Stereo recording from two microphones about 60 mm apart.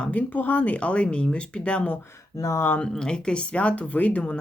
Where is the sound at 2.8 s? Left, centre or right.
Centre.